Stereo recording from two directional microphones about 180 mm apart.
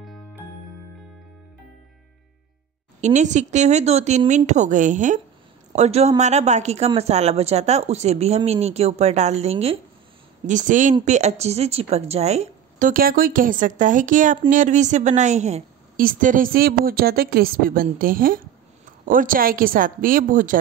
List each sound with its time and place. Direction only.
3.0 s a woman's voice: 40° right (ahead or behind)